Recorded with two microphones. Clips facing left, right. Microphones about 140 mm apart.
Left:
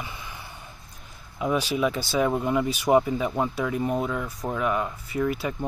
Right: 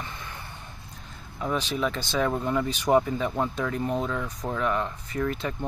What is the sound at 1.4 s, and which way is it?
Speech, 10° left (ahead or behind).